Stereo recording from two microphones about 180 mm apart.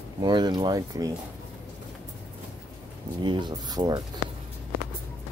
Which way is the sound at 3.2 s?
25° right (ahead or behind).